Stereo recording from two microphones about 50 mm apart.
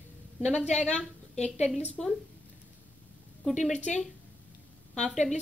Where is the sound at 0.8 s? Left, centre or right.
Left.